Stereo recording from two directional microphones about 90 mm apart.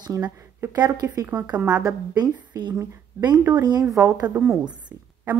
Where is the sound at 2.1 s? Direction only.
50° right (ahead or behind).